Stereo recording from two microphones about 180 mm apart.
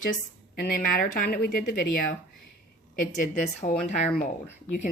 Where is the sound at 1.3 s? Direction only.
55° left (ahead or behind).